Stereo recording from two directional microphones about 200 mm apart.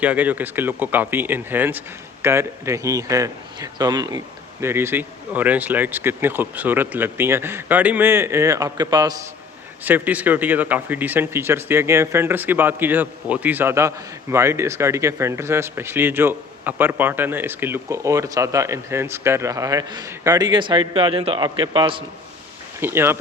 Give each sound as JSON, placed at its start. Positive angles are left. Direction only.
{"t": 0.0, "sound": "speech", "side_deg": -5}
{"t": 9.8, "sound": "speech", "side_deg": -10}
{"t": 22.8, "sound": "speech", "side_deg": -10}